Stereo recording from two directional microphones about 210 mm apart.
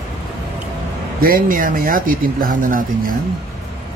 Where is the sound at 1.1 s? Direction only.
40° right (ahead or behind).